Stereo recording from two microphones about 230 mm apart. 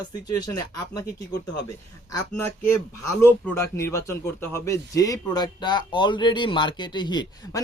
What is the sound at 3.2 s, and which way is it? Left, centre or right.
Speech, centre.